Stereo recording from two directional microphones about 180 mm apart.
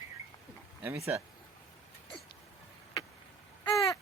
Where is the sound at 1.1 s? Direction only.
10° right (ahead or behind).